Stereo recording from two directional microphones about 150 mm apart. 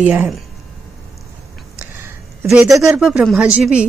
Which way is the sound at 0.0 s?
10° right (ahead or behind).